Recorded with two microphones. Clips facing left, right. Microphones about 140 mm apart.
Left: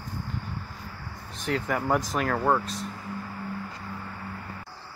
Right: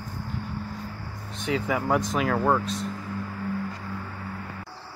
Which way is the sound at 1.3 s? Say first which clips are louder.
Right 2 dB; centre (ahead or behind).